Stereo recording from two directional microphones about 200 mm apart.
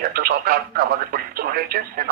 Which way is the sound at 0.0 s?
50° right (ahead or behind).